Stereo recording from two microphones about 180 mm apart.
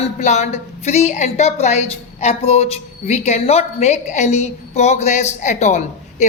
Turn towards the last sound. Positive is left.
turn(degrees=40)  # may be behind; listen again after turning